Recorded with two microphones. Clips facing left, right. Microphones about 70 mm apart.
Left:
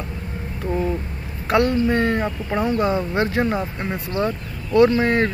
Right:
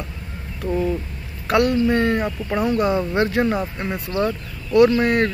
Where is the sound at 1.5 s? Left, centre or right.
Left.